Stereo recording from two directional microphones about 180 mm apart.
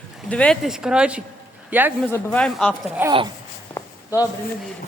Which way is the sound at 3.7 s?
20° left (ahead or behind).